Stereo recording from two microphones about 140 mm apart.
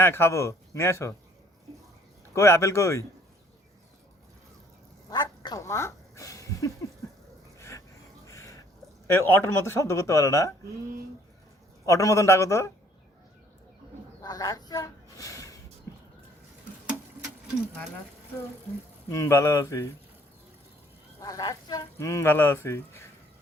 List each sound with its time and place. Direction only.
0.0 s speech: 15° left (ahead or behind)
2.3 s speech: 20° left (ahead or behind)
5.0 s a sound: 25° left (ahead or behind)
8.3 s a sound: 20° left (ahead or behind)
9.1 s speech: 15° left (ahead or behind)
11.9 s speech: 25° left (ahead or behind)
14.2 s a sound: 25° left (ahead or behind)
19.1 s speech: 20° left (ahead or behind)
21.2 s speech: 25° left (ahead or behind)